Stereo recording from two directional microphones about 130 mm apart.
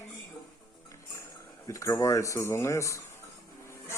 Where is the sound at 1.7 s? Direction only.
20° left (ahead or behind).